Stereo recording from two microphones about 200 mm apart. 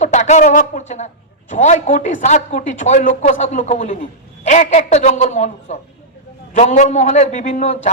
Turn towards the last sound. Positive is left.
turn(degrees=35)  # may be behind; listen again after turning